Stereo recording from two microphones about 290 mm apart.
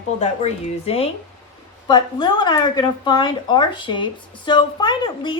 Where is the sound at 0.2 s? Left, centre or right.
Left.